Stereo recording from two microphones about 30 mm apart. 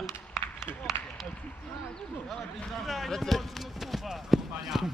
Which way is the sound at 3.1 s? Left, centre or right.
Centre.